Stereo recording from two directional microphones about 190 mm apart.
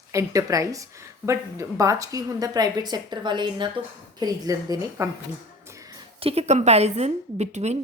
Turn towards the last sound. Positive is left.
turn(degrees=-35)  # may be behind; listen again after turning